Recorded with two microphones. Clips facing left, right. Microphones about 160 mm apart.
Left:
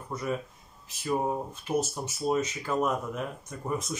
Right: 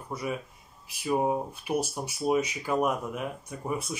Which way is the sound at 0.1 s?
10° right (ahead or behind).